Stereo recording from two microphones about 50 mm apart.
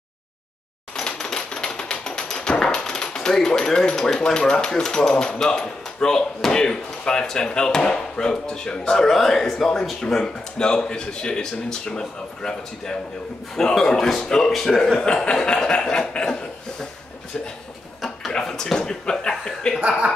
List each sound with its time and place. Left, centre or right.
0.9 s typewriter: centre
13.6 s chuckle: centre
14.5 s a man's voice: centre
15.0 s chuckle: centre
18.3 s chuckle: centre